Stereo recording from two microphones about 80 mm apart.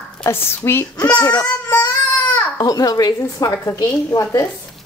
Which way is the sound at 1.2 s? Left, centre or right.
Left.